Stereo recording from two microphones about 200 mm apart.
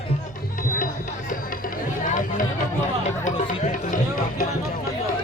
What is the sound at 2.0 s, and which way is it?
Run, 40° left (ahead or behind).